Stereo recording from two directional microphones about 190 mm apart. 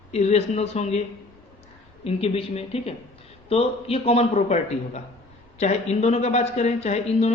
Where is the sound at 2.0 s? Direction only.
30° left (ahead or behind).